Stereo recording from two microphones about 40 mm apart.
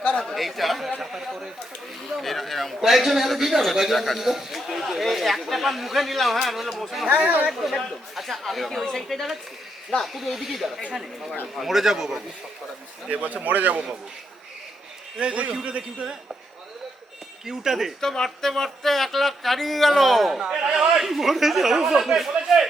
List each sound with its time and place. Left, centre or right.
0.0 s chatter: left
0.3 s speech: centre
2.0 s a sound: centre
2.8 s a man's voice: centre
7.1 s a man's voice: right
7.6 s a man's voice: centre
8.8 s speech: centre
10.0 s a man's voice: centre
13.1 s a man's voice: right
15.2 s a man's voice: right
17.4 s speech: centre
18.0 s a man's voice: centre
20.4 s speech: centre